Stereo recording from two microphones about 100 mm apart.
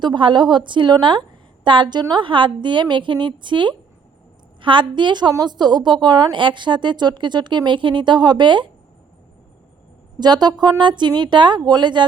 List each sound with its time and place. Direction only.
0.0 s a woman's voice: 50° right (ahead or behind)
10.2 s a woman's voice: 45° right (ahead or behind)